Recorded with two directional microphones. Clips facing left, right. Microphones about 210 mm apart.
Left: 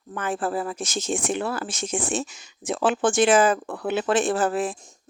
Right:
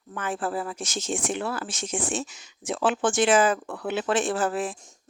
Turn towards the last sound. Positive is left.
turn(degrees=40)  # may be behind; listen again after turning